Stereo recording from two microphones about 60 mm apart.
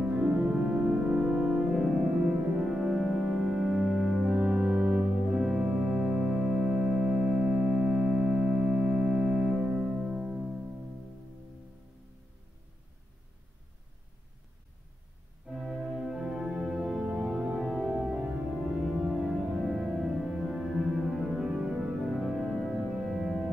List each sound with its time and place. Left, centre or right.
0.0 s music: centre
0.3 s music: centre
4.3 s music: right
5.2 s organ: centre
15.4 s organ: centre
17.6 s music: centre
19.3 s music: centre